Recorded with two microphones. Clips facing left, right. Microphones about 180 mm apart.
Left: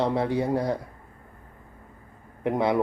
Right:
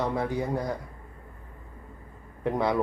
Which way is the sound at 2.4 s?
20° left (ahead or behind).